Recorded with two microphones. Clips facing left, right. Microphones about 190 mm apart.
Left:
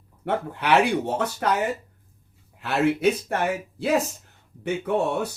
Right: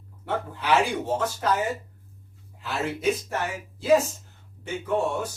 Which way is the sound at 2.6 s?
65° left (ahead or behind).